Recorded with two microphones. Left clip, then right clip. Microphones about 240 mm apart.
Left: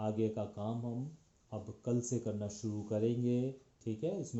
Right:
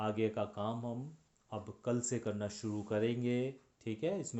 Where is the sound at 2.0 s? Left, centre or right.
Right.